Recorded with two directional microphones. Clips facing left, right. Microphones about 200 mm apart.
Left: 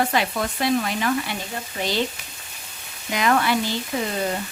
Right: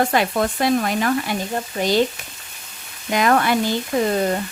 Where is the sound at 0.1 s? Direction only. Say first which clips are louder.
Right 4 dB; 50° right (ahead or behind).